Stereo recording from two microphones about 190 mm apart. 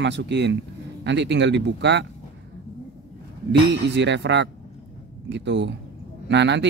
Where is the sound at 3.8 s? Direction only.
70° right (ahead or behind).